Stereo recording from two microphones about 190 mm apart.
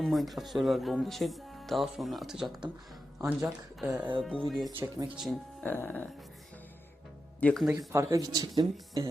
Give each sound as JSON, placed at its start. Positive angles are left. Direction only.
{"t": 0.0, "sound": "speech", "side_deg": 0}
{"t": 3.2, "sound": "speech", "side_deg": -15}
{"t": 3.8, "sound": "speech", "side_deg": -5}
{"t": 7.3, "sound": "speech", "side_deg": 5}
{"t": 7.8, "sound": "speech", "side_deg": -15}